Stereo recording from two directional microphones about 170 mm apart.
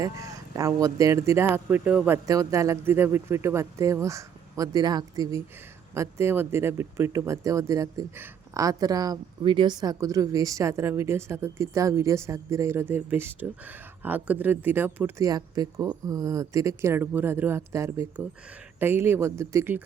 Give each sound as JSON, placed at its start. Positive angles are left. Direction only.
{"t": 0.0, "sound": "speech", "side_deg": -20}